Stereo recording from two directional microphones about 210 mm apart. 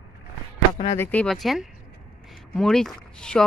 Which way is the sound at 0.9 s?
10° left (ahead or behind).